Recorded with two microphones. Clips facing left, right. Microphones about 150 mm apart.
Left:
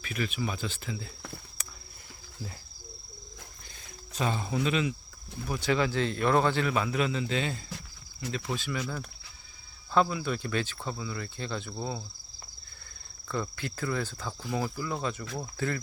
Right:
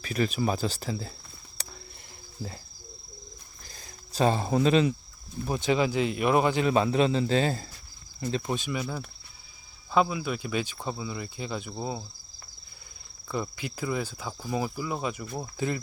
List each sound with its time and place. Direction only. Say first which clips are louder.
0.0 s speech: right 6 dB; 35° right (ahead or behind)
1.6 s a sound: right 3 dB; 30° right (ahead or behind)
3.7 s cricket: even; 35° right (ahead or behind)
5.5 s speech: right 2 dB; 20° right (ahead or behind)
6.7 s speech: right 5 dB; 30° right (ahead or behind)
8.3 s speech: right 4 dB; 25° right (ahead or behind)
9.9 s speech: right 1 dB; 10° right (ahead or behind)
13.2 s speech: right 1 dB; 15° right (ahead or behind)